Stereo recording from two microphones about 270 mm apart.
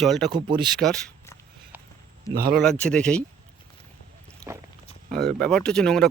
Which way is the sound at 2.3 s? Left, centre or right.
Right.